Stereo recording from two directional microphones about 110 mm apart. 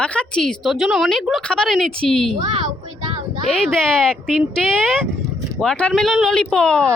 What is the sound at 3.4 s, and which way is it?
Speech, 5° left (ahead or behind).